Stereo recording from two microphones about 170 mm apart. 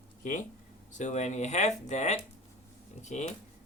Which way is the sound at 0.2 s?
50° left (ahead or behind).